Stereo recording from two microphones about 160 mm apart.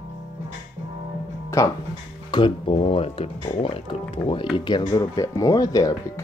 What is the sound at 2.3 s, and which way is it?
Speech, 30° left (ahead or behind).